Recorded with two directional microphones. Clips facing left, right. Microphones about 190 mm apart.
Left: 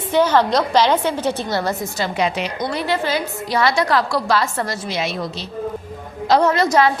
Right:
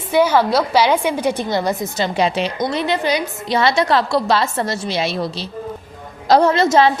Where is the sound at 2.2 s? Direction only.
30° right (ahead or behind).